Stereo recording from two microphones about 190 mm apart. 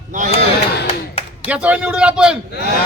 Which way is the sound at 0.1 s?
40° right (ahead or behind).